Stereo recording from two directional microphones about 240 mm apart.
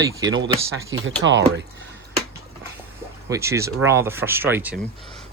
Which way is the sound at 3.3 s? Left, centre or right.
Centre.